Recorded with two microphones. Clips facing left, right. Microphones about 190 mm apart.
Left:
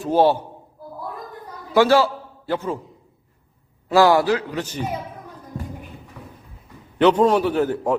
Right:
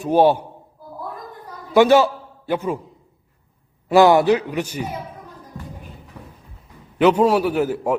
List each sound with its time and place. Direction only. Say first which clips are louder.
0.0 s a man's voice: right 2 dB; 15° right (ahead or behind)
1.7 s a man's voice: right 2 dB; 20° right (ahead or behind)
3.8 s a man's voice: right 3 dB; 20° right (ahead or behind)
7.0 s a man's voice: even; 5° right (ahead or behind)